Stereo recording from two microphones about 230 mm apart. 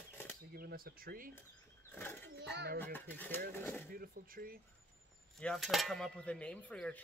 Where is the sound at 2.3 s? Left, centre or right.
Right.